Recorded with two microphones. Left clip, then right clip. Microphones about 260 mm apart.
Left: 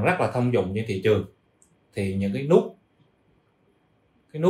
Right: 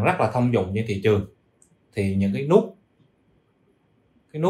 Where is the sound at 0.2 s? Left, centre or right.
Right.